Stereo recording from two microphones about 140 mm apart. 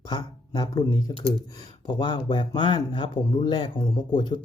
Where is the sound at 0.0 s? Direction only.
30° left (ahead or behind).